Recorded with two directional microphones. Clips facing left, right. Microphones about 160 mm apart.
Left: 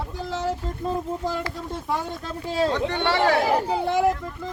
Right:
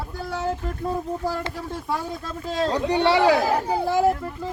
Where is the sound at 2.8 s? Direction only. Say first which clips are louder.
Right 4 dB; 15° right (ahead or behind).